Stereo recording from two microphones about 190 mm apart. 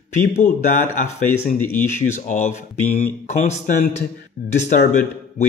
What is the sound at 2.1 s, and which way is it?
Speech, 40° left (ahead or behind).